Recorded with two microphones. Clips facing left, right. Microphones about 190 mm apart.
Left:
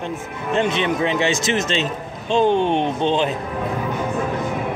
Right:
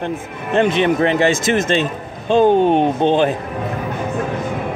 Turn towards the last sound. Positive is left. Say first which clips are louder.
# right 5 dB
turn(degrees=-50)  # may be behind; listen again after turning